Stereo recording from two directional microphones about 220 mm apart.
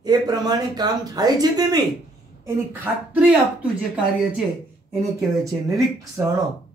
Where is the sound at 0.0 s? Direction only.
20° right (ahead or behind).